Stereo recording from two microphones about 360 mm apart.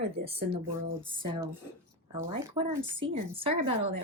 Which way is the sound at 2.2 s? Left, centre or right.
Centre.